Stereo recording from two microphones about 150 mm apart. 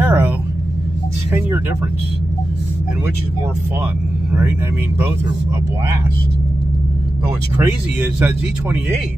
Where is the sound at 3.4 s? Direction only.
15° right (ahead or behind).